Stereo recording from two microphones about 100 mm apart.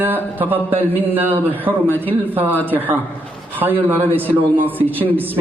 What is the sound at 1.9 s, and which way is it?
Speech, 15° left (ahead or behind).